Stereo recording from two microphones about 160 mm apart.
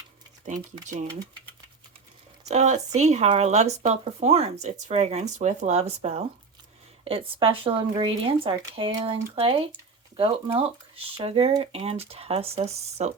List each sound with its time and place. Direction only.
0.4 s speech: 50° right (ahead or behind)
2.5 s speech: 45° right (ahead or behind)